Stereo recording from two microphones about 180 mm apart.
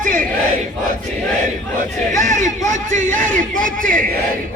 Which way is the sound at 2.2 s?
45° right (ahead or behind).